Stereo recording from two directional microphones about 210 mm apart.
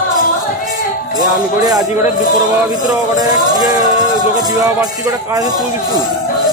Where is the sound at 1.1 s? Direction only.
20° right (ahead or behind).